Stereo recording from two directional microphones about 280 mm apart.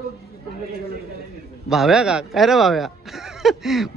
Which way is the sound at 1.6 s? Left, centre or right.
Centre.